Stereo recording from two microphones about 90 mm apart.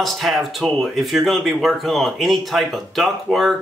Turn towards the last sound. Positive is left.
turn(degrees=0)  # may be behind; listen again after turning